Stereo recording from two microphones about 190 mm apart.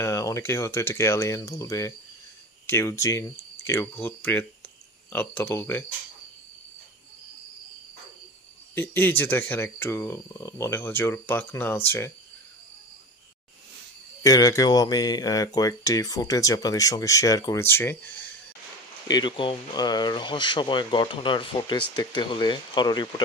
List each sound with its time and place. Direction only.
0.0 s speech: 15° left (ahead or behind)
8.7 s speech: 10° left (ahead or behind)
14.2 s speech: 20° left (ahead or behind)
19.0 s speech: 25° left (ahead or behind)